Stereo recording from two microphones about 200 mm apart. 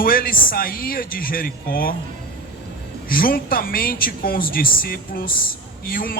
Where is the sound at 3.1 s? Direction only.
45° left (ahead or behind).